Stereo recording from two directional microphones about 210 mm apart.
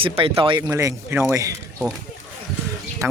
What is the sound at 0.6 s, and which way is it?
Speech, 15° right (ahead or behind).